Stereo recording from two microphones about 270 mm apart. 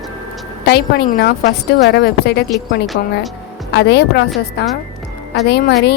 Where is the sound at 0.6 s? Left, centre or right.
Left.